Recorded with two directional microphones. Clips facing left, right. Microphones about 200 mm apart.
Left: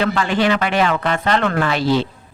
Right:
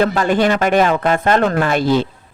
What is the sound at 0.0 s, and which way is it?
Speech, 45° right (ahead or behind).